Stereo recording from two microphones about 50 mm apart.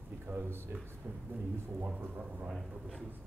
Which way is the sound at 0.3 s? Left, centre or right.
Right.